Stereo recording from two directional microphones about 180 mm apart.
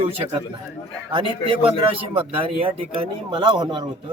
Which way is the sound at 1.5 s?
30° right (ahead or behind).